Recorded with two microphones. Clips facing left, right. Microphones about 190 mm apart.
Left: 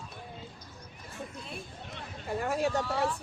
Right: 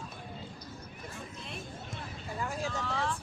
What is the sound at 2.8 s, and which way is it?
Speech, 10° left (ahead or behind).